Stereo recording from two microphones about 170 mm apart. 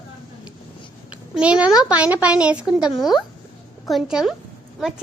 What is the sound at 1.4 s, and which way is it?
A child's voice, 5° right (ahead or behind).